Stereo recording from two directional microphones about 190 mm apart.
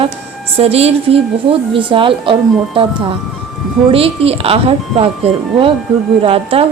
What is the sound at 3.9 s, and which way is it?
Speech, 30° right (ahead or behind).